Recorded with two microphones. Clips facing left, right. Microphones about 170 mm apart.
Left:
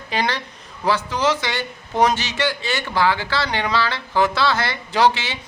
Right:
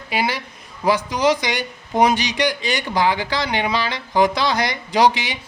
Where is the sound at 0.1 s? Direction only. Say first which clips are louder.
Right 1 dB; 10° right (ahead or behind).